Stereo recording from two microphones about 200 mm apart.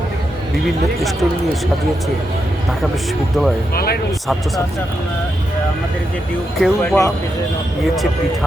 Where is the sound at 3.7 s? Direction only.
50° left (ahead or behind).